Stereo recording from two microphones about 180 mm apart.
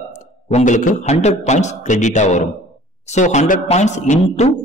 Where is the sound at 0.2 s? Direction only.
40° left (ahead or behind).